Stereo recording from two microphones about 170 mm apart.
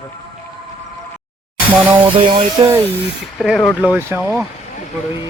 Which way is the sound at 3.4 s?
Centre (ahead or behind).